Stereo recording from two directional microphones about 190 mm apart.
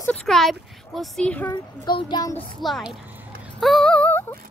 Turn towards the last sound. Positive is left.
turn(degrees=10)  # may be behind; listen again after turning